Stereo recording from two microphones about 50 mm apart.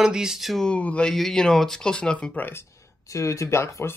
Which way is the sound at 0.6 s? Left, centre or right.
Left.